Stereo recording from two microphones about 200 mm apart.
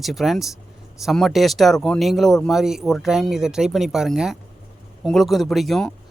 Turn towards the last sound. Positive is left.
turn(degrees=0)  # may be behind; listen again after turning